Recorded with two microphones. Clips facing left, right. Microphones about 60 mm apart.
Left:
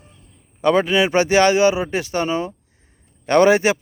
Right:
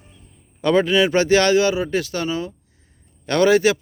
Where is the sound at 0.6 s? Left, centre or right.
Centre.